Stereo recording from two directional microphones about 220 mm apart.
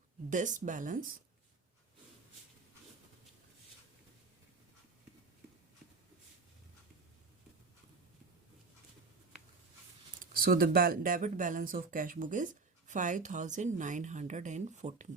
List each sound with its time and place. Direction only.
0.3 s speech: 35° right (ahead or behind)
10.2 s speech: 40° right (ahead or behind)